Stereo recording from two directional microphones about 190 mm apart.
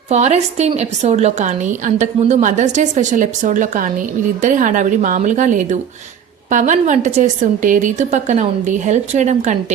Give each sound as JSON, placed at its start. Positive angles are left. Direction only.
{"t": 0.1, "sound": "a woman's voice", "side_deg": -35}